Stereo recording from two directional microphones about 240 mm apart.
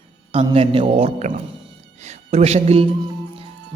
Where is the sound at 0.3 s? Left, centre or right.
Right.